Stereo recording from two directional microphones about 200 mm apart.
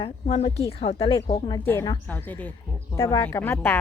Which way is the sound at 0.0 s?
30° left (ahead or behind).